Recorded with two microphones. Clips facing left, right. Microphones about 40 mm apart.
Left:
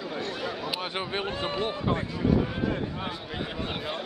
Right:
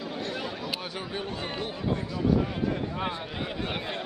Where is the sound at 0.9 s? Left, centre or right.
Left.